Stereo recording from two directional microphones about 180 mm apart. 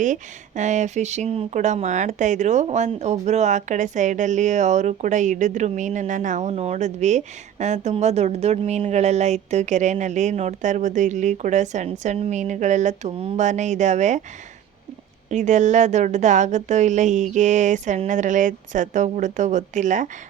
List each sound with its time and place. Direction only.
0.0 s speech: 45° right (ahead or behind)
15.3 s speech: 40° right (ahead or behind)